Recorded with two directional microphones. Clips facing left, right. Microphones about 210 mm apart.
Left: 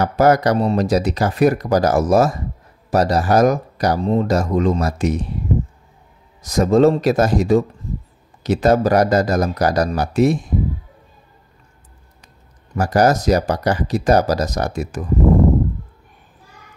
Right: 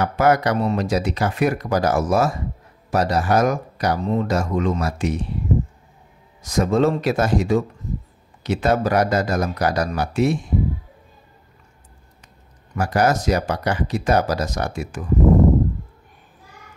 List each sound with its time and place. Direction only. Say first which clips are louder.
0.0 s speech: left 3 dB; 40° left (ahead or behind)
6.4 s speech: left 5 dB; 40° left (ahead or behind)
12.7 s speech: left 4 dB; 40° left (ahead or behind)